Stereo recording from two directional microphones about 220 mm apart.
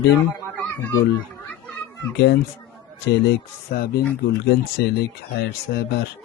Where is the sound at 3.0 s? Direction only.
50° left (ahead or behind).